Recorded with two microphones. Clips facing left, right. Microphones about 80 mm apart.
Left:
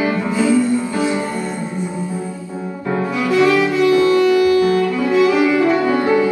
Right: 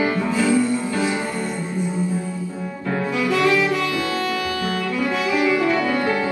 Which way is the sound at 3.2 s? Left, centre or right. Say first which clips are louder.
Left 5 dB; left.